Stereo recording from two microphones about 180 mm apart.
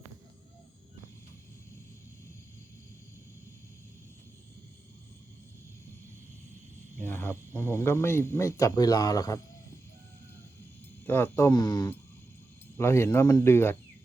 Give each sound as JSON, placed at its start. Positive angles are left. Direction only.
{"t": 7.0, "sound": "speech", "side_deg": 10}
{"t": 11.0, "sound": "speech", "side_deg": 10}